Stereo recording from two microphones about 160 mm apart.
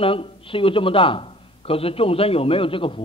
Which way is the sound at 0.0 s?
35° left (ahead or behind).